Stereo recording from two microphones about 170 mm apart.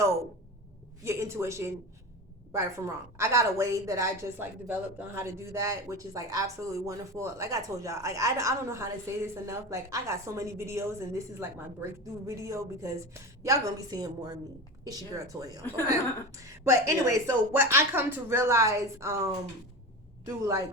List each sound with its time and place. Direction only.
1.0 s a woman's voice: 15° right (ahead or behind)